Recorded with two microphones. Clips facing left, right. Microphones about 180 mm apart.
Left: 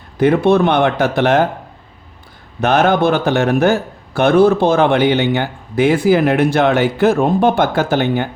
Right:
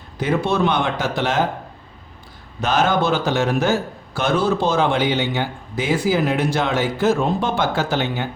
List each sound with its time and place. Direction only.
0.2 s a man's voice: 60° left (ahead or behind)
2.6 s a man's voice: 60° left (ahead or behind)